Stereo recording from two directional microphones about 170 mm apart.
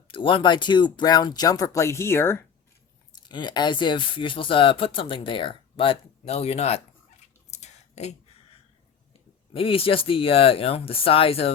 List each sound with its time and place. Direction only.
0.1 s speech: 30° left (ahead or behind); by 2.4 s 15° left (ahead or behind)
3.2 s speech: 25° left (ahead or behind)
7.5 s a sound: 40° left (ahead or behind)
9.5 s speech: 35° left (ahead or behind)